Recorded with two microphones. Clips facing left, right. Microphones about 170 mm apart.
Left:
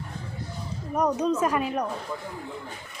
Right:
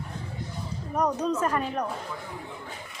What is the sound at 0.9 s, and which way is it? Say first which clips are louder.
Speech: left 2 dB; 10° left (ahead or behind).